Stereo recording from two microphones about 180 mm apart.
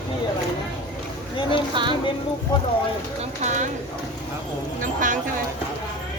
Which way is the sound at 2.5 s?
25° left (ahead or behind).